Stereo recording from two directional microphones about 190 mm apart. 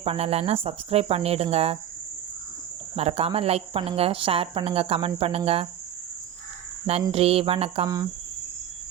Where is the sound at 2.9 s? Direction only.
30° right (ahead or behind).